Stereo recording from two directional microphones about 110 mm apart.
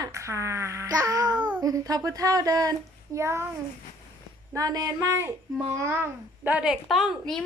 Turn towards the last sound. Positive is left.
turn(degrees=0)  # may be behind; listen again after turning